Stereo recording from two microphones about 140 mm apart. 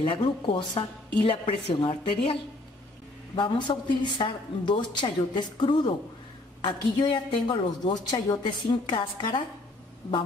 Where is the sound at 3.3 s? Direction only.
35° left (ahead or behind).